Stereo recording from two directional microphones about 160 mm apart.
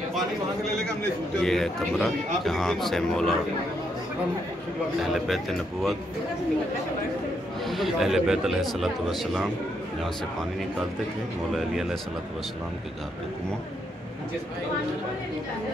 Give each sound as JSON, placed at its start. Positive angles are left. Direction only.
{"t": 1.4, "sound": "speech", "side_deg": 5}
{"t": 5.3, "sound": "speech", "side_deg": 0}
{"t": 7.6, "sound": "speech", "side_deg": 0}